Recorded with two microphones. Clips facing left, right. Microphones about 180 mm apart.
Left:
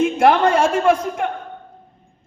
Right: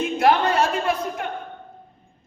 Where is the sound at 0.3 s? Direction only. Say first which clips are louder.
Left 3 dB; 50° left (ahead or behind).